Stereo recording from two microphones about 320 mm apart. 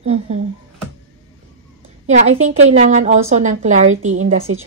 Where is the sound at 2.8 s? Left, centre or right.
Right.